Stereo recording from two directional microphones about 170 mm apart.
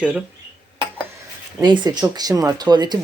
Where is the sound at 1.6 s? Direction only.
25° right (ahead or behind).